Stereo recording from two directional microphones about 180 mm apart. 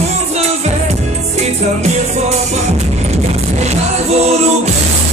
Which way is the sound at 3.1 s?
35° right (ahead or behind).